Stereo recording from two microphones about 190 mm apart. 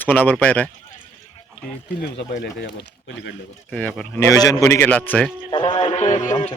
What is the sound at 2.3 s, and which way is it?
Speech, 60° left (ahead or behind).